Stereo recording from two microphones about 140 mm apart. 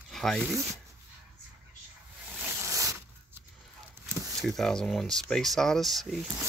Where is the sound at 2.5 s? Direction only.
20° right (ahead or behind).